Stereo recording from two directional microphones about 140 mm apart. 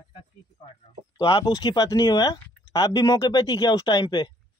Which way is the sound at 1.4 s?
30° left (ahead or behind).